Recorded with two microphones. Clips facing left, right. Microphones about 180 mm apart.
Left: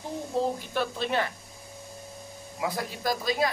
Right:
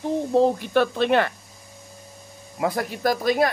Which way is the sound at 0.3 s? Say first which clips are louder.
Right 9 dB; 70° right (ahead or behind).